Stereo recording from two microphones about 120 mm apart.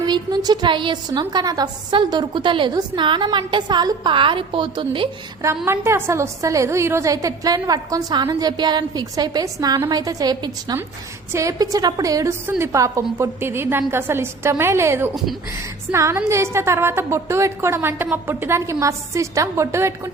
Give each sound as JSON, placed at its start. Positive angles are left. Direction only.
{"t": 0.0, "sound": "a woman's voice", "side_deg": -35}
{"t": 5.6, "sound": "a woman's voice", "side_deg": -20}